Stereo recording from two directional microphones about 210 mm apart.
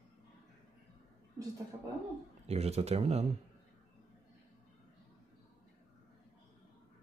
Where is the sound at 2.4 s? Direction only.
30° right (ahead or behind).